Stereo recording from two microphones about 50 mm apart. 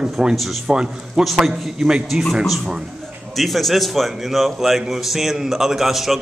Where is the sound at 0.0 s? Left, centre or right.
Centre.